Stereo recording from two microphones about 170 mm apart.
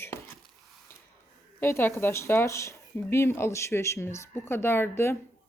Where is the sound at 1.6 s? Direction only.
15° left (ahead or behind).